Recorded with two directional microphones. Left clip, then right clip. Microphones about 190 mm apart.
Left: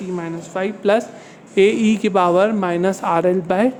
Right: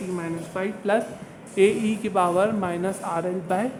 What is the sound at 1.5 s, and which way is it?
Speech, 45° left (ahead or behind).